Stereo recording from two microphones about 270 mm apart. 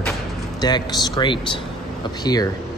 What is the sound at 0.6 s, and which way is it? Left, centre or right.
Speech, centre.